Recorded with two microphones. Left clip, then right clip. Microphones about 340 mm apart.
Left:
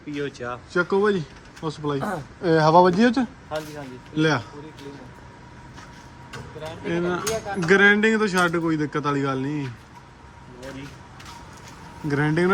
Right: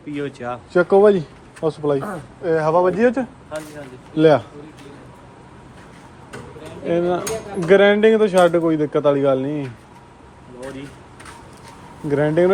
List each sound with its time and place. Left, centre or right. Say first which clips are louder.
0.1 s speech: right 3 dB; centre
0.7 s speech: right 8 dB; centre
2.4 s speech: left 1 dB; centre
3.5 s speech: even; left
4.2 s a man's voice: right 9 dB; centre
6.8 s a man's voice: right 6 dB; centre
12.0 s a man's voice: right 6 dB; centre